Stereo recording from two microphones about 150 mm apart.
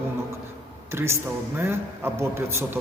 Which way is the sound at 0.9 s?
15° right (ahead or behind).